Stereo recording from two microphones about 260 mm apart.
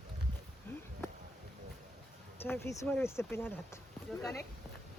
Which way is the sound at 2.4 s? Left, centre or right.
Centre.